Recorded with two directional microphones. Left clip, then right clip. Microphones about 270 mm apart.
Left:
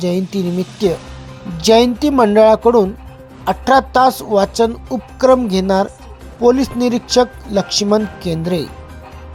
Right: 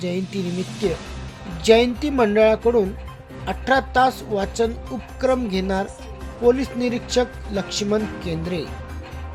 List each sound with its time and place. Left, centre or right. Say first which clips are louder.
0.0 s speech: left 8 dB; left